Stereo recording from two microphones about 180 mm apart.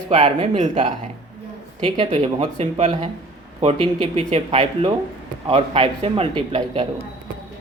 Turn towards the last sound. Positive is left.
turn(degrees=-30)  # may be behind; listen again after turning